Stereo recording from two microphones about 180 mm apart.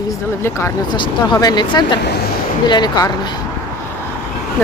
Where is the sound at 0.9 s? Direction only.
25° left (ahead or behind).